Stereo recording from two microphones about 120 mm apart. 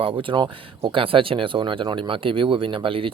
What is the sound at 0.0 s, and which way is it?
Speech, 45° right (ahead or behind).